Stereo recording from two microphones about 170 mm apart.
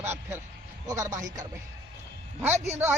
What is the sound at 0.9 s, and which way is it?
A man's voice, 15° right (ahead or behind).